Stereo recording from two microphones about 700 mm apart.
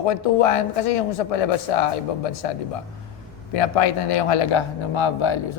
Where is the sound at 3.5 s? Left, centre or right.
Left.